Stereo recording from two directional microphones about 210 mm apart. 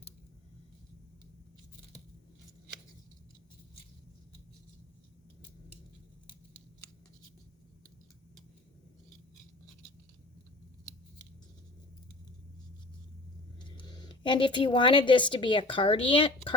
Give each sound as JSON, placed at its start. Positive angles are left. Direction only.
{"t": 13.7, "sound": "speech", "side_deg": 20}